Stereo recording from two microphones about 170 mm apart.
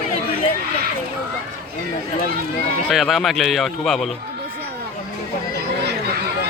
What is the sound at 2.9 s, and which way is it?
Speech, centre (ahead or behind).